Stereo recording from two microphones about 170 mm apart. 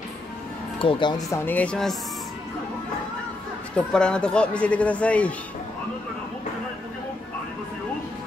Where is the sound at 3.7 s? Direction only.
5° left (ahead or behind).